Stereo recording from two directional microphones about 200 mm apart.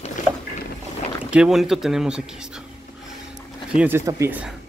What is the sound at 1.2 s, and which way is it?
Speech, 5° right (ahead or behind).